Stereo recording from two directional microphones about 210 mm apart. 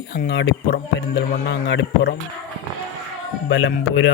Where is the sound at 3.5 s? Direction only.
65° left (ahead or behind).